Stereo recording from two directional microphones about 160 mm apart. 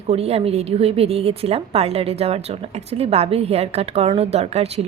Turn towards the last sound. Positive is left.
turn(degrees=-40)  # may be behind; listen again after turning